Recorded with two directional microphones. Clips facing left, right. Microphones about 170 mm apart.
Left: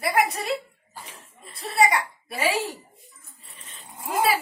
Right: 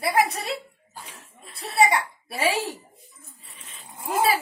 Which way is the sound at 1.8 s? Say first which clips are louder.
Right 1 dB; 30° right (ahead or behind).